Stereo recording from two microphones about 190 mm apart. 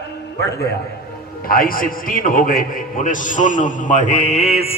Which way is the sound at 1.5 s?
50° left (ahead or behind).